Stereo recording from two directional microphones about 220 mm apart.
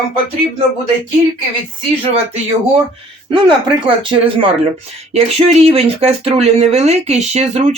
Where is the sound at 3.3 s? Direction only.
20° right (ahead or behind).